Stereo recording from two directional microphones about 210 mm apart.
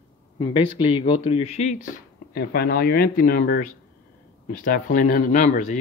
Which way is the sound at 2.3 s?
50° left (ahead or behind).